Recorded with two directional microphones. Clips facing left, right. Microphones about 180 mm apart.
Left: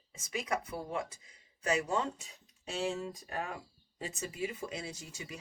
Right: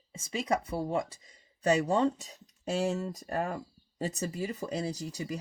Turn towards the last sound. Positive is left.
turn(degrees=-40)  # may be behind; listen again after turning